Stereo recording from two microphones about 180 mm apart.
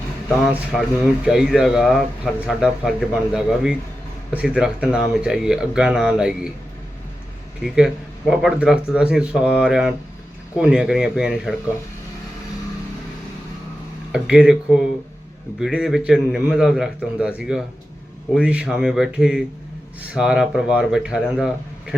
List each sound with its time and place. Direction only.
0.7 s speech: 5° right (ahead or behind)
8.3 s speech: 5° right (ahead or behind)
14.1 s speech: 5° right (ahead or behind)